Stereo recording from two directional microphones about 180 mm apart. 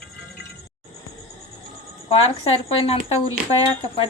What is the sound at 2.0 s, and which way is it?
Speech, 30° left (ahead or behind).